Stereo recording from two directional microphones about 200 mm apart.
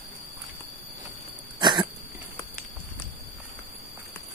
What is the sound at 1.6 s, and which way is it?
Cough, 20° right (ahead or behind).